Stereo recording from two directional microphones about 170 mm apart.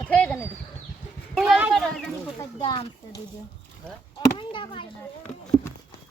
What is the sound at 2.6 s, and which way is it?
Speech, 30° left (ahead or behind).